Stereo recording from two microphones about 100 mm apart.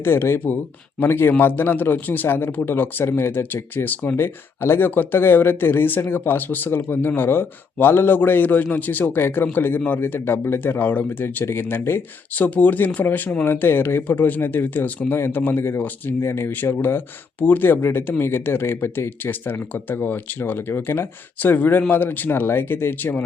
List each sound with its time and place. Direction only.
0.0 s speech: 25° left (ahead or behind)